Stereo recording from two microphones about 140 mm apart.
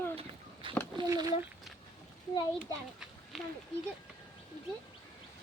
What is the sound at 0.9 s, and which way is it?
Speech, 25° right (ahead or behind).